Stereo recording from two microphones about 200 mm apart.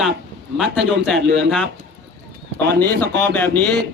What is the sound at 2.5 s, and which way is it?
Speech, 10° left (ahead or behind).